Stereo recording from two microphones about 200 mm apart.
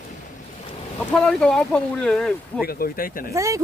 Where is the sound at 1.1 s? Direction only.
5° left (ahead or behind).